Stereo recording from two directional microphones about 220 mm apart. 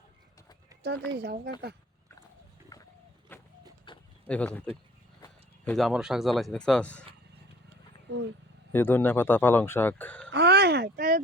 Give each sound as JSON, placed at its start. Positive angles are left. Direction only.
{"t": 1.1, "sound": "speech", "side_deg": -50}
{"t": 2.7, "sound": "a sound", "side_deg": 15}
{"t": 3.9, "sound": "a sound", "side_deg": 20}
{"t": 4.3, "sound": "speech", "side_deg": 5}
{"t": 5.6, "sound": "speech", "side_deg": 0}
{"t": 8.7, "sound": "speech", "side_deg": 10}
{"t": 10.3, "sound": "speech", "side_deg": -50}